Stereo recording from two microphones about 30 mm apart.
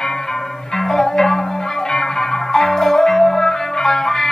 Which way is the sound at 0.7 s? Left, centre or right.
Centre.